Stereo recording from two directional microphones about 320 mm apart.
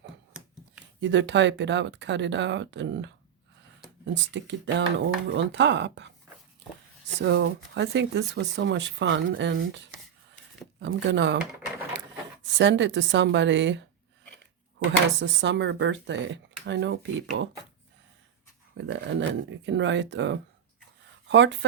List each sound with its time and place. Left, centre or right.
0.0 s scissors: centre
1.0 s speech: right
7.2 s speech: right
15.2 s speech: right
18.8 s speech: right